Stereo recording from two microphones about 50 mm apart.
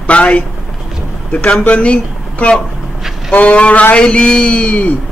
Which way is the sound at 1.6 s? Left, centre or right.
Left.